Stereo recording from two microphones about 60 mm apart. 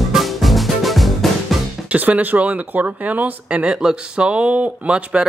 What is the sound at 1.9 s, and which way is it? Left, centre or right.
Speech, right.